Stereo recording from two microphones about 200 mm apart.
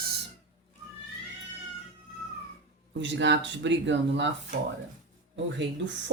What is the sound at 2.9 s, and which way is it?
Speech, 65° right (ahead or behind).